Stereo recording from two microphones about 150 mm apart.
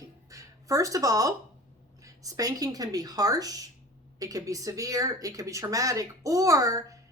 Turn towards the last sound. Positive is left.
turn(degrees=-20)  # may be behind; listen again after turning